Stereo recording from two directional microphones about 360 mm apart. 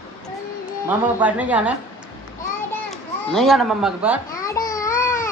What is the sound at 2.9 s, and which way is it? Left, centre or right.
A child's voice, centre.